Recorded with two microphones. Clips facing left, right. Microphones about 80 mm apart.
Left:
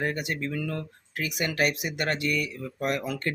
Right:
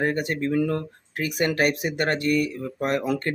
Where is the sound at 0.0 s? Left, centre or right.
Right.